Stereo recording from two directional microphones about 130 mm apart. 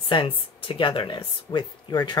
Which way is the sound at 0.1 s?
45° left (ahead or behind).